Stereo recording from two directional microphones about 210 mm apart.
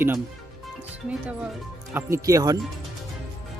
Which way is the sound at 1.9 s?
15° right (ahead or behind).